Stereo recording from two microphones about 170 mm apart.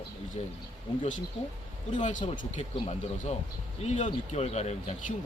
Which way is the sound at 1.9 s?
45° left (ahead or behind).